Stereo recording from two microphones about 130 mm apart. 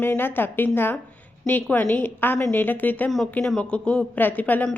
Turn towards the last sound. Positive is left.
turn(degrees=15)  # may be behind; listen again after turning